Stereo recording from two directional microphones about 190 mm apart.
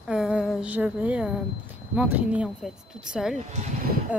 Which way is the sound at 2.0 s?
5° right (ahead or behind).